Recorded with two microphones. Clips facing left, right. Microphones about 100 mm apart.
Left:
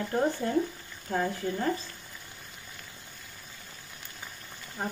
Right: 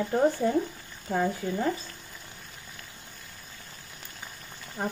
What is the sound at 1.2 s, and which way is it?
Speech, 5° right (ahead or behind).